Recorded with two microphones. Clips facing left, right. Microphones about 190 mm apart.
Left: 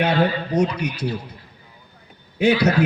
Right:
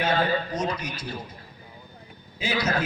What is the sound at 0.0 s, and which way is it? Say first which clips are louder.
A man's voice: left 4 dB; 65° left (ahead or behind).